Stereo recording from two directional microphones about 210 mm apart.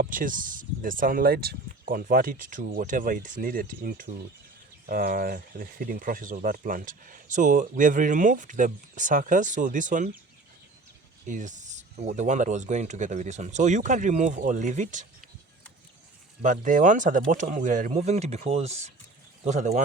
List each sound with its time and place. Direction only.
0.0 s speech: 40° right (ahead or behind)
11.3 s speech: 35° right (ahead or behind)
16.4 s speech: 35° right (ahead or behind)